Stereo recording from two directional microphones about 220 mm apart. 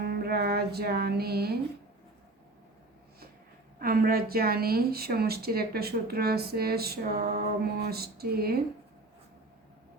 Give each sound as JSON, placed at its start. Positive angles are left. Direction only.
{"t": 0.0, "sound": "music", "side_deg": -45}
{"t": 3.8, "sound": "speech", "side_deg": -40}